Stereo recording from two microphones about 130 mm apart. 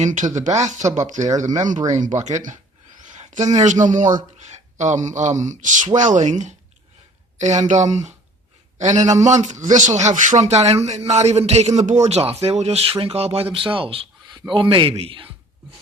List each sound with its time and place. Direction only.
0.0 s speech: 70° right (ahead or behind)
3.0 s a sound: 70° right (ahead or behind)
3.4 s a man's voice: 65° right (ahead or behind); by 15.3 s 45° right (ahead or behind)